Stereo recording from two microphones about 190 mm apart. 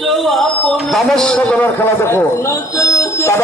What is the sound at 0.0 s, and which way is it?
A man's voice, centre (ahead or behind).